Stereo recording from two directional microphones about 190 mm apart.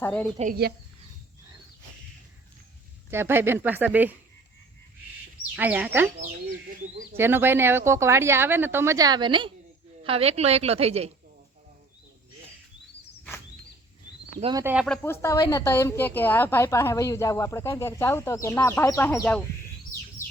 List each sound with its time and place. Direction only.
0.0 s a woman's voice: 5° left (ahead or behind)
3.1 s speech: 10° right (ahead or behind)
5.4 s speech: 10° right (ahead or behind)
7.2 s a woman's voice: 10° right (ahead or behind); by 11.1 s 30° right (ahead or behind)
14.3 s speech: 20° right (ahead or behind)
14.8 s a woman's voice: 10° left (ahead or behind)